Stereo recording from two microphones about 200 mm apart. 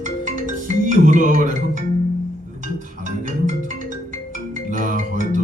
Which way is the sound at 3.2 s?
40° right (ahead or behind).